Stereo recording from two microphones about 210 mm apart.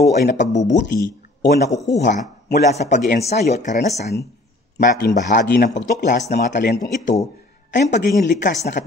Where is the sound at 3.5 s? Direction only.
35° left (ahead or behind).